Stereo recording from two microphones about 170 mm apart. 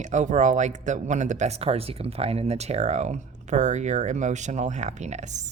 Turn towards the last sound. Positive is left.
turn(degrees=-45)  # may be behind; listen again after turning